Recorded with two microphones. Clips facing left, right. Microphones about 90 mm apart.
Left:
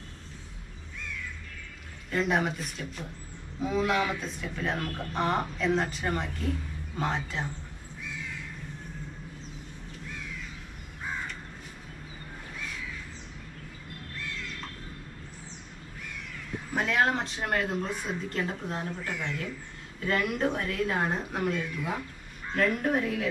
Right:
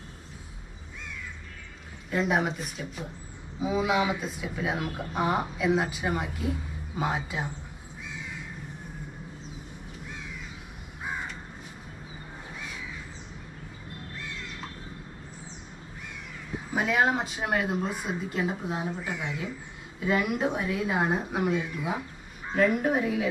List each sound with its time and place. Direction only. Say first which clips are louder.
2.0 s speech: right 1 dB; 5° right (ahead or behind)
8.0 s crow: even; 15° right (ahead or behind)
11.1 s crow: right 1 dB; 15° right (ahead or behind)
12.5 s crow: left 1 dB; 15° right (ahead or behind)
14.1 s crow: left 2 dB; 15° right (ahead or behind)
16.5 s speech: right 1 dB; 5° right (ahead or behind)